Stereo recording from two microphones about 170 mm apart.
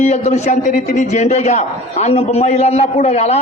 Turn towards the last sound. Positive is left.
turn(degrees=40)  # may be behind; listen again after turning